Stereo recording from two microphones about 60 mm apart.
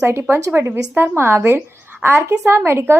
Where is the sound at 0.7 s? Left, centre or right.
Right.